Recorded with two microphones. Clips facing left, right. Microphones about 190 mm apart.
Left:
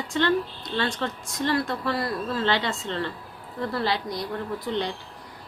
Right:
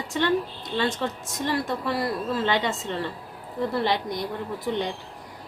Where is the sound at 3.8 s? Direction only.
20° right (ahead or behind).